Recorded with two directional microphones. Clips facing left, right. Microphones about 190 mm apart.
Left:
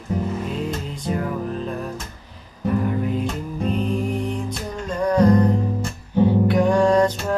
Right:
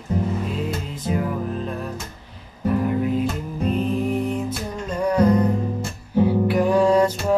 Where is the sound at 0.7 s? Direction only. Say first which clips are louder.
Even; 5° right (ahead or behind).